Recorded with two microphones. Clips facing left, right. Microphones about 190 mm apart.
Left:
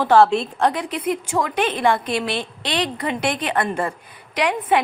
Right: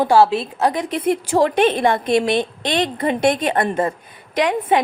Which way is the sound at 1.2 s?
35° right (ahead or behind).